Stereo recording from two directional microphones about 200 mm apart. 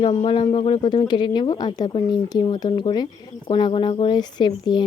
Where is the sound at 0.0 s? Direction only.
25° left (ahead or behind).